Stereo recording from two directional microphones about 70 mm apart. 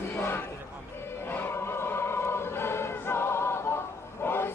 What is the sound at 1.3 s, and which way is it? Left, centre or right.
Choir, left.